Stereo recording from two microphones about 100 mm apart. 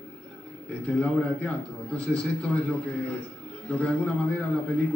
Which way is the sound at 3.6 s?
10° left (ahead or behind).